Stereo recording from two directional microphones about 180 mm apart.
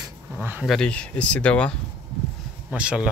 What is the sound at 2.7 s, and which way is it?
Speech, 5° right (ahead or behind).